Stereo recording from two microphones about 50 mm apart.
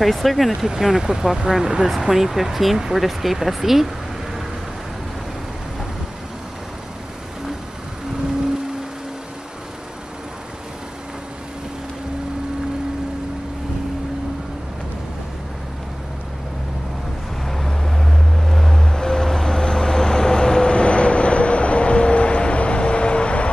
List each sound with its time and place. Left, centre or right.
0.0 s speech: centre
17.5 s vehicle: centre; by 23.5 s left